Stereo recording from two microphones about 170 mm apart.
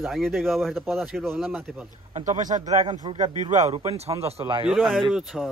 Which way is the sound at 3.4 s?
45° right (ahead or behind).